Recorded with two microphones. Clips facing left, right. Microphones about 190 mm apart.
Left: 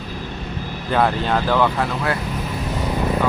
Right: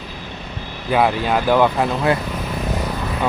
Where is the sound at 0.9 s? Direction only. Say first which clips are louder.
Right 2 dB; 10° right (ahead or behind).